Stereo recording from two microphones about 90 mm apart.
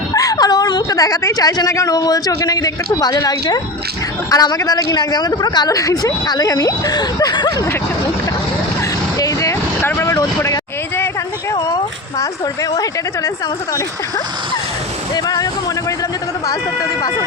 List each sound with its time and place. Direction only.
0.1 s speech: 40° left (ahead or behind)
9.1 s vehicle: 40° left (ahead or behind)
12.7 s speech: 40° left (ahead or behind)
15.1 s speech: 40° left (ahead or behind)